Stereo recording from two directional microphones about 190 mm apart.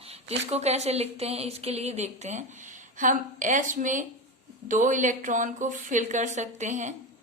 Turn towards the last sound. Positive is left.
turn(degrees=-40)  # may be behind; listen again after turning